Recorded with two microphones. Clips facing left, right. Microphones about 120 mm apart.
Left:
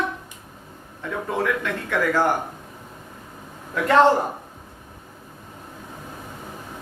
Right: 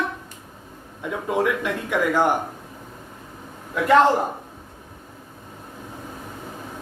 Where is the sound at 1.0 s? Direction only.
15° right (ahead or behind).